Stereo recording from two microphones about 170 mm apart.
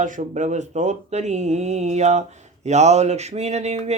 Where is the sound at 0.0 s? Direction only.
45° right (ahead or behind).